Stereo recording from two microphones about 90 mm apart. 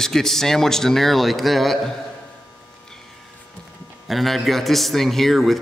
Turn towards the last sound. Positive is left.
turn(degrees=0)  # may be behind; listen again after turning